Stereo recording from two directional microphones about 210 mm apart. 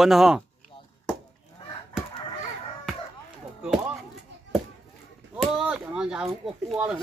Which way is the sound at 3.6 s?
Centre (ahead or behind).